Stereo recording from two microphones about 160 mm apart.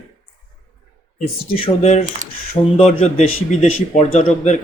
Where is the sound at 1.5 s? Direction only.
40° left (ahead or behind).